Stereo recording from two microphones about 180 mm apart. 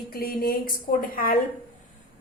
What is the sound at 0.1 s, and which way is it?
A woman's voice, 55° left (ahead or behind).